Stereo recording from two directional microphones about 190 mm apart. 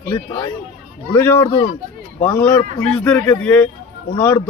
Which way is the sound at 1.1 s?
15° left (ahead or behind).